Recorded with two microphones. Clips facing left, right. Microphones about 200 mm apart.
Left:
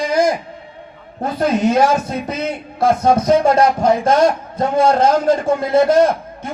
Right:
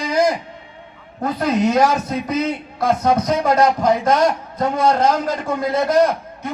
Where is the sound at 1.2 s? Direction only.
30° left (ahead or behind).